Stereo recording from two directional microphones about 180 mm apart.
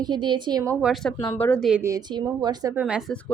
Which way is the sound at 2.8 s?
5° right (ahead or behind).